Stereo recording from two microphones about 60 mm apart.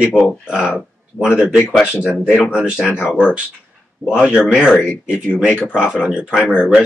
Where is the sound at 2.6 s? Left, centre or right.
Centre.